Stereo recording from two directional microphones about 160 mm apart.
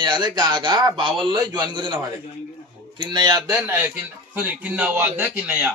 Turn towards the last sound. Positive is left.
turn(degrees=-10)  # may be behind; listen again after turning